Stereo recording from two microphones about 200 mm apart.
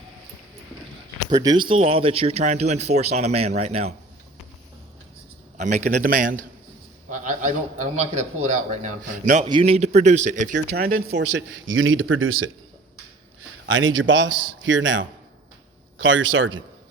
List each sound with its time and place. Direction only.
1.3 s speech: 20° right (ahead or behind)
5.5 s speech: 35° right (ahead or behind)
9.5 s speech: 25° right (ahead or behind)
10.5 s speech: 50° right (ahead or behind); by 12.5 s 90° right
13.7 s speech: 75° right (ahead or behind)